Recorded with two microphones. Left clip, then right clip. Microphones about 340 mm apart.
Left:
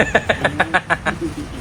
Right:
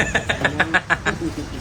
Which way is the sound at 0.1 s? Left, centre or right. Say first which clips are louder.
Left 4 dB; centre.